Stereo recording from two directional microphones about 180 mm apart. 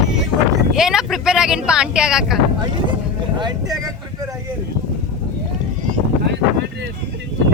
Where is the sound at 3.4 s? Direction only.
25° right (ahead or behind).